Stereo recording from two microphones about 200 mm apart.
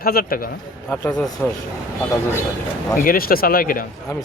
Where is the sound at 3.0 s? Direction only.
45° left (ahead or behind).